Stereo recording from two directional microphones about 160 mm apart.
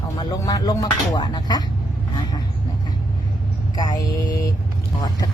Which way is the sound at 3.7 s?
25° left (ahead or behind).